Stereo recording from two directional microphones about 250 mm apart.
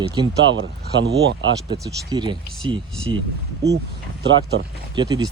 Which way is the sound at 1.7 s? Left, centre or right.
Centre.